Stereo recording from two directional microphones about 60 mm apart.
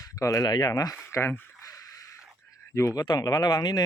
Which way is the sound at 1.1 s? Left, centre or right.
Left.